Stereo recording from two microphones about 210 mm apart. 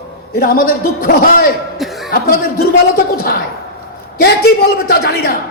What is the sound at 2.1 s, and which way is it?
Speech, 45° left (ahead or behind).